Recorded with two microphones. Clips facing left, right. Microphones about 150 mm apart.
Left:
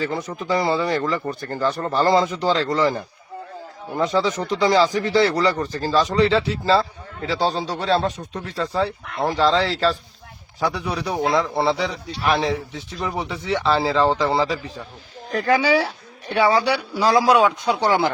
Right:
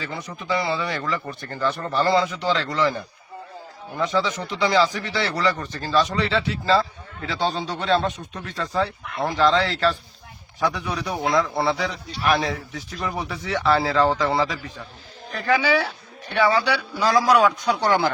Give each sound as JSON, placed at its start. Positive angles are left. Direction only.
{"t": 0.0, "sound": "speech", "side_deg": 40}
{"t": 17.0, "sound": "speech", "side_deg": 30}